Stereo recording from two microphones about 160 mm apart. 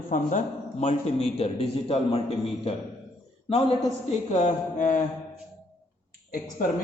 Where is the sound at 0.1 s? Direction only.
55° left (ahead or behind).